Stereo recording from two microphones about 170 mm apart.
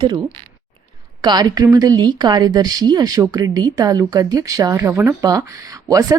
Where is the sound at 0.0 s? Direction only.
25° right (ahead or behind).